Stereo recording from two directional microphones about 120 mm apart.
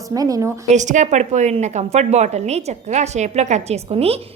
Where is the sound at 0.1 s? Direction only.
30° right (ahead or behind).